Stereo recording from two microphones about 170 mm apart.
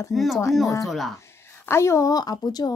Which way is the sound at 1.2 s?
15° left (ahead or behind).